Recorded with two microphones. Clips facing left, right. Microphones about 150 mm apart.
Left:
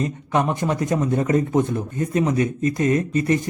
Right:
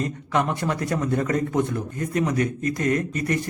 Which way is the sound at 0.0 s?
20° left (ahead or behind).